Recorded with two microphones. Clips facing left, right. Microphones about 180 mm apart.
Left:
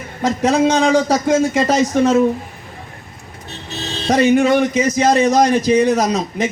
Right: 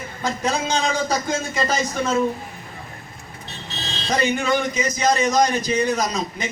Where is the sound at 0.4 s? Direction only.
75° left (ahead or behind).